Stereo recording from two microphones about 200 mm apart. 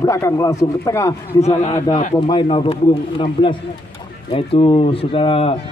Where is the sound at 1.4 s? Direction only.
35° left (ahead or behind).